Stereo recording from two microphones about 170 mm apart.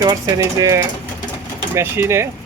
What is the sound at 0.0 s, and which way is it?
Speech, 20° right (ahead or behind).